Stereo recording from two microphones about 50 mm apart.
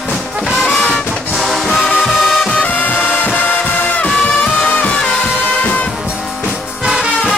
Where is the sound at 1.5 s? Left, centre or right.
Centre.